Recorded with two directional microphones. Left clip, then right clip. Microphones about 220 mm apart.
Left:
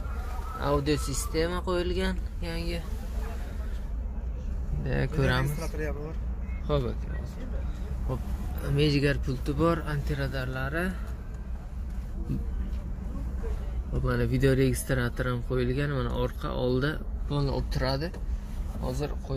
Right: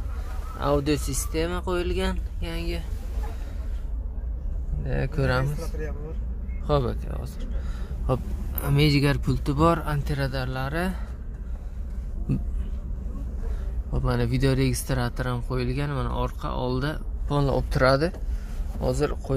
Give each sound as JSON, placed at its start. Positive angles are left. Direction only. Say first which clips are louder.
{"t": 0.6, "sound": "speech", "louder": "right 3 dB", "side_deg": -10}
{"t": 4.8, "sound": "speech", "louder": "right 1 dB", "side_deg": 0}
{"t": 6.7, "sound": "speech", "louder": "right 5 dB", "side_deg": -25}
{"t": 8.6, "sound": "speech", "louder": "right 3 dB", "side_deg": -20}
{"t": 14.0, "sound": "speech", "louder": "right 1 dB", "side_deg": -15}
{"t": 17.3, "sound": "speech", "louder": "right 7 dB", "side_deg": -25}